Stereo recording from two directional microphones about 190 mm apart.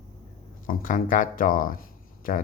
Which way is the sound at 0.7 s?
45° left (ahead or behind).